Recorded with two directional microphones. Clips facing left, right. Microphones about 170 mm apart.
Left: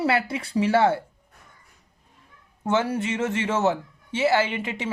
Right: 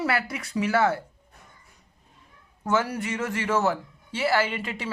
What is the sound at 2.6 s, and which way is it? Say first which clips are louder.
A man's voice: left 2 dB; 25° left (ahead or behind).